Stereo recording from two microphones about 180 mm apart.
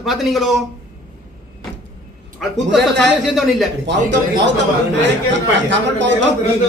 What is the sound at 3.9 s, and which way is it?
Speech, 75° right (ahead or behind).